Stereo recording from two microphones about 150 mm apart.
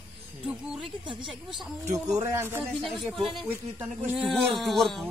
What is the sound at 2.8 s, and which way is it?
Speech, centre (ahead or behind).